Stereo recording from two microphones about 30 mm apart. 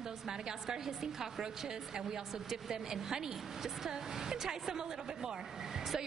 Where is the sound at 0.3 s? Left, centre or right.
Centre.